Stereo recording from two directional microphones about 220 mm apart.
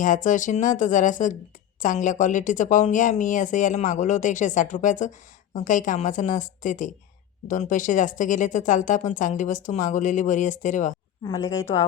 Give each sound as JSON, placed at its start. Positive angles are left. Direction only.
{"t": 0.0, "sound": "speech", "side_deg": 35}
{"t": 11.2, "sound": "speech", "side_deg": 15}